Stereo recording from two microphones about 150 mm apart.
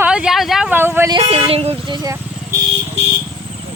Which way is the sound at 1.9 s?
25° right (ahead or behind).